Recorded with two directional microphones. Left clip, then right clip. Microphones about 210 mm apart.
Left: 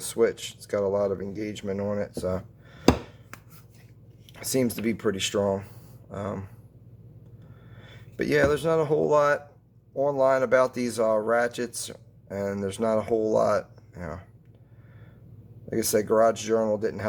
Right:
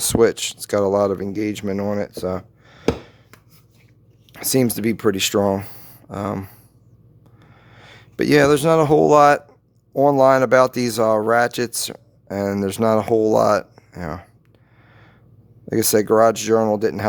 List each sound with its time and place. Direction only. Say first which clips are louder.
0.0 s speech: right 8 dB; 55° right (ahead or behind)
4.4 s speech: right 7 dB; 55° right (ahead or behind)
15.7 s speech: right 7 dB; 55° right (ahead or behind)